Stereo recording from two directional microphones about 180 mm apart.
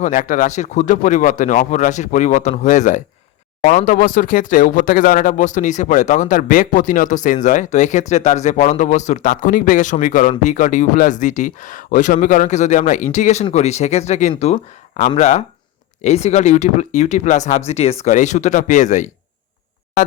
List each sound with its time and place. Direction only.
0.0 s speech: 45° left (ahead or behind)